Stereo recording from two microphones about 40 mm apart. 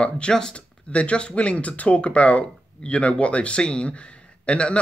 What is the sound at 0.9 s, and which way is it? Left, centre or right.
Speech, left.